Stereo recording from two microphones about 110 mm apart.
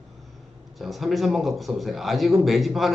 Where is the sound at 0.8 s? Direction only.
Centre (ahead or behind).